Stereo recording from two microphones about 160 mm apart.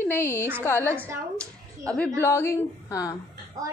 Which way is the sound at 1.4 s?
5° left (ahead or behind).